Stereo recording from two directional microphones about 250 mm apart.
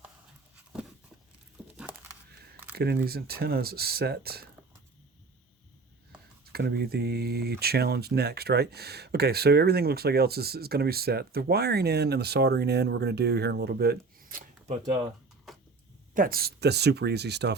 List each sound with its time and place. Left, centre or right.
1.7 s a sound: centre
2.7 s speech: right
6.4 s speech: right
16.1 s speech: right